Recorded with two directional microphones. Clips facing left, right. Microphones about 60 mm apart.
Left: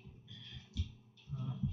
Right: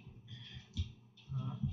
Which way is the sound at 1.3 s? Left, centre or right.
Centre.